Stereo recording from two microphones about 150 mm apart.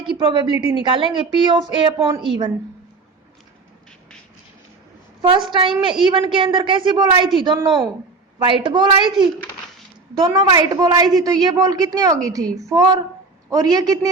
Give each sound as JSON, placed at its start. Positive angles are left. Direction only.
{"t": 0.0, "sound": "a woman's voice", "side_deg": -35}
{"t": 5.2, "sound": "a woman's voice", "side_deg": -35}